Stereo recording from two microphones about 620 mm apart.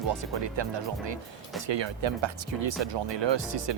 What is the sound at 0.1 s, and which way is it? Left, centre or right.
Speech, right.